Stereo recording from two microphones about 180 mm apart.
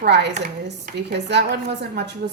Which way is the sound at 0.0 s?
70° right (ahead or behind).